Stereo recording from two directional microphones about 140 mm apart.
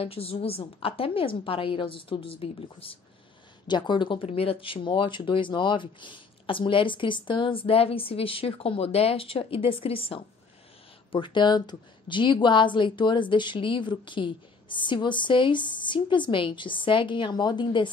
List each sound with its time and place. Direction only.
0.0 s a woman's voice: 45° left (ahead or behind)